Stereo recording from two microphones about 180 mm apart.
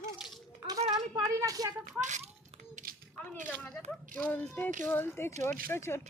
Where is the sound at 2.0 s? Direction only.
40° right (ahead or behind).